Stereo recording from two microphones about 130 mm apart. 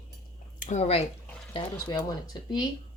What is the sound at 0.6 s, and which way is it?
Speech, 65° left (ahead or behind).